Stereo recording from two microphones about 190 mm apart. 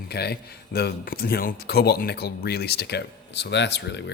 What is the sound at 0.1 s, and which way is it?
Speech, 55° left (ahead or behind).